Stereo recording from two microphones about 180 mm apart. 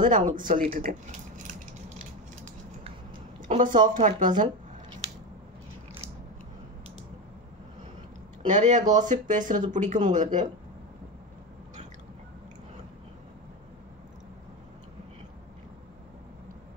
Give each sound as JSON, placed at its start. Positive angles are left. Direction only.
{"t": 0.0, "sound": "speech", "side_deg": -45}
{"t": 1.5, "sound": "a sound", "side_deg": -45}
{"t": 3.8, "sound": "speech", "side_deg": -45}
{"t": 8.5, "sound": "speech", "side_deg": -45}